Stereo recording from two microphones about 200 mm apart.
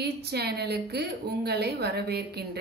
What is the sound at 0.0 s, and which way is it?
A woman's voice, 55° right (ahead or behind).